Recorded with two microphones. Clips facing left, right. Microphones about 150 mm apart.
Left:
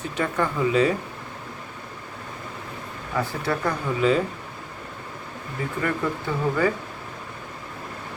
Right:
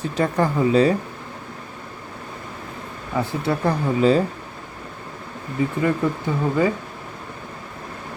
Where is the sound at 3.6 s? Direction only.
35° right (ahead or behind).